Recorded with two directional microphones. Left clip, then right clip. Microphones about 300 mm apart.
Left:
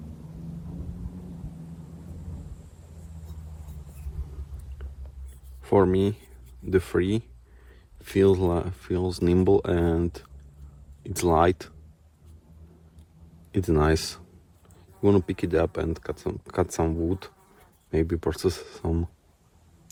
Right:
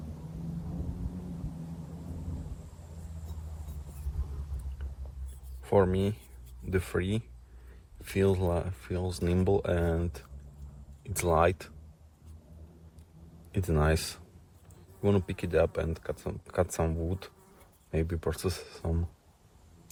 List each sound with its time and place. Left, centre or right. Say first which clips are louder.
5.6 s speech: left 5 dB; left
13.5 s speech: left 6 dB; left